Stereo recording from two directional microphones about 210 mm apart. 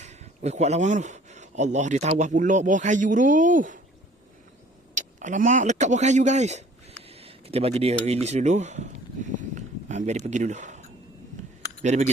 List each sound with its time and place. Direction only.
0.0 s speech: 30° right (ahead or behind)
4.9 s speech: 35° right (ahead or behind)
7.1 s a sound: 30° right (ahead or behind)
11.8 s speech: 35° right (ahead or behind)